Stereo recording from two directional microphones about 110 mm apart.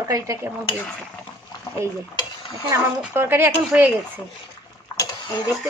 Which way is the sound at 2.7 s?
20° right (ahead or behind).